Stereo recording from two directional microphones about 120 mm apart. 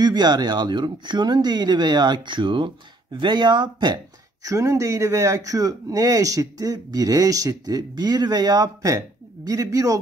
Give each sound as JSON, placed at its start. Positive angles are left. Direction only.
{"t": 0.0, "sound": "speech", "side_deg": -35}